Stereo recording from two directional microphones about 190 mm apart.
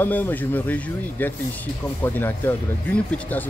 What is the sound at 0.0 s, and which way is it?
Speech, 10° left (ahead or behind).